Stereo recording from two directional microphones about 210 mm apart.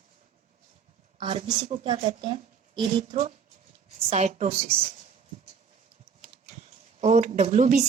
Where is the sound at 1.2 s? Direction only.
25° right (ahead or behind).